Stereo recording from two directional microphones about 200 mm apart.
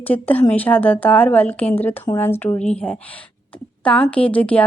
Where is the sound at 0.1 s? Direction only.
10° left (ahead or behind).